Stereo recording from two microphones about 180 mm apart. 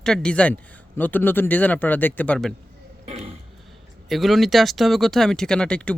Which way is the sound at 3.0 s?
35° right (ahead or behind).